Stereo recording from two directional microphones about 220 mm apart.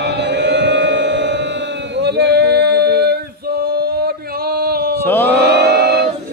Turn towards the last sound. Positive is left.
turn(degrees=-45)  # may be behind; listen again after turning